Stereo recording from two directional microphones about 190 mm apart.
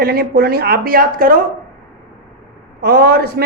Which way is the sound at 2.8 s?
55° right (ahead or behind).